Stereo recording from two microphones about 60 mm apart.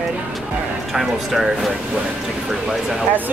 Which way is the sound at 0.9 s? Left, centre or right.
Centre.